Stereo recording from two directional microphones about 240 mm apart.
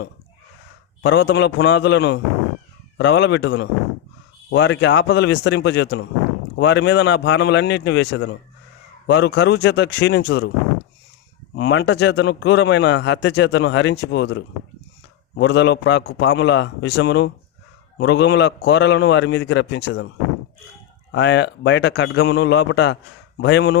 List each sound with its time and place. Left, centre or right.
1.0 s a man's voice: left
11.5 s a man's voice: left
21.1 s a man's voice: left